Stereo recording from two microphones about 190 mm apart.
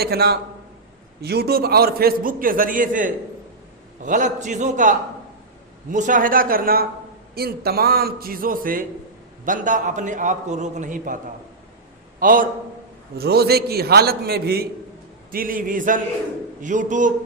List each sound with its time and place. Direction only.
0.0 s a man's voice: 55° right (ahead or behind)
12.2 s a man's voice: 45° right (ahead or behind)
13.1 s a man's voice: 55° right (ahead or behind)